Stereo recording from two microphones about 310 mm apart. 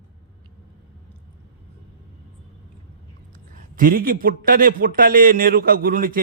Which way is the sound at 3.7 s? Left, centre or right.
Right.